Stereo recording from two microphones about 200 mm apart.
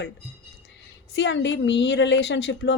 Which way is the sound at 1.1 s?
65° left (ahead or behind).